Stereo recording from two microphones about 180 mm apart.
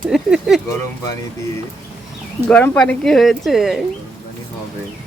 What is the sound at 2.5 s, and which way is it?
Speech, 5° left (ahead or behind).